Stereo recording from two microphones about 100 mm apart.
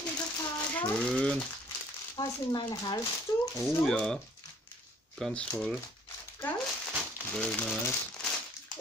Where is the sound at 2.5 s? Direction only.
45° left (ahead or behind).